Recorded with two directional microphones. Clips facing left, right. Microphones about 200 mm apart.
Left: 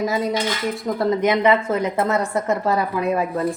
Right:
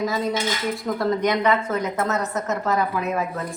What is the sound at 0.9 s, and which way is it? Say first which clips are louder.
A woman's voice: left 3 dB; 25° left (ahead or behind).